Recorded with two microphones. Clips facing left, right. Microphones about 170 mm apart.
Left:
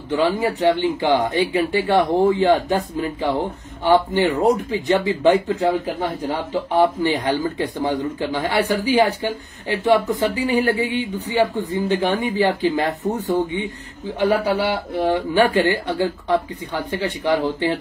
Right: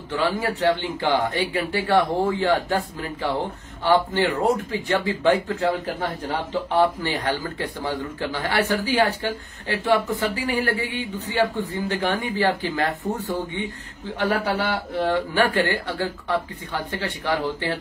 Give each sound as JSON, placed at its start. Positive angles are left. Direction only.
{"t": 0.1, "sound": "speech", "side_deg": 15}
{"t": 14.2, "sound": "speech", "side_deg": 10}